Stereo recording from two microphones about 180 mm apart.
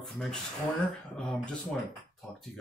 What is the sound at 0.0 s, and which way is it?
Speech, centre (ahead or behind).